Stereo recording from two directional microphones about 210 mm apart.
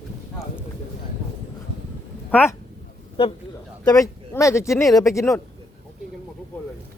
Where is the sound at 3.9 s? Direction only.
15° left (ahead or behind).